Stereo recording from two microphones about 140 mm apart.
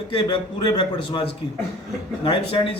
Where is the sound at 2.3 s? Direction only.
40° left (ahead or behind).